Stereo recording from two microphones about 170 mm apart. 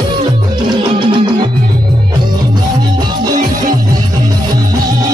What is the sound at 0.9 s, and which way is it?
Music, 30° right (ahead or behind).